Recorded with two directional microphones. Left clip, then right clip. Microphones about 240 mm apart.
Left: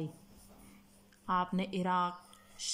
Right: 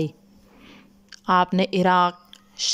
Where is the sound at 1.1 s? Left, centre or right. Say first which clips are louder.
Right 14 dB; right.